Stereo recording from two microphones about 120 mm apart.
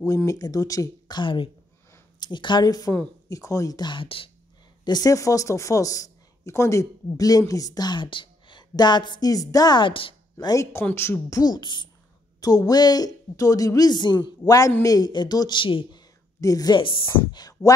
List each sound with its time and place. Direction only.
0.0 s speech: 25° left (ahead or behind); by 4.3 s 45° left (ahead or behind)
4.8 s speech: 35° left (ahead or behind)
10.4 s speech: 25° left (ahead or behind); by 16.0 s 45° left (ahead or behind)
16.3 s speech: 30° left (ahead or behind)